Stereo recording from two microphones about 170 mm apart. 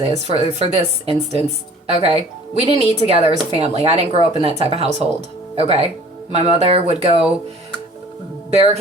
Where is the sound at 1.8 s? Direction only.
35° right (ahead or behind).